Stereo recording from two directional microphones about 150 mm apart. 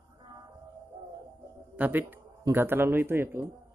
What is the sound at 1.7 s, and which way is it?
A man's voice, 10° right (ahead or behind).